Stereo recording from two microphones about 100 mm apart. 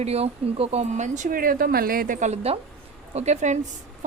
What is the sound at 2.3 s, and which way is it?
Speech, 90° right.